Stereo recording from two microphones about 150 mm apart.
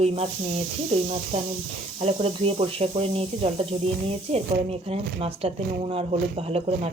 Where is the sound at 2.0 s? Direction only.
40° right (ahead or behind).